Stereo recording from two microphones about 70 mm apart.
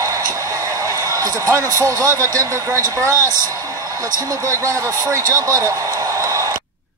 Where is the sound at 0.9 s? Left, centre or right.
Right.